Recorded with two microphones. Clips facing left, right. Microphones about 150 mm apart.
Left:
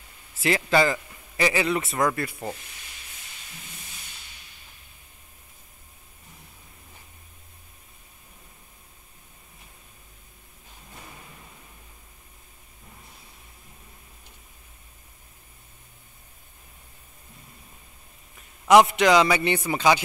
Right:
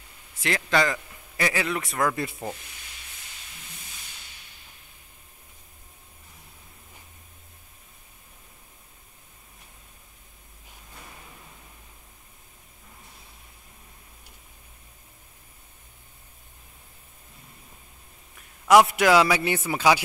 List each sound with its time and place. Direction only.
0.4 s a man's voice: 5° left (ahead or behind)
18.7 s a man's voice: centre (ahead or behind)